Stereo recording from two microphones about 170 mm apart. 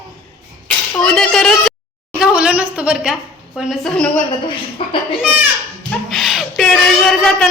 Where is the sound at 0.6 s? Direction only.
5° left (ahead or behind).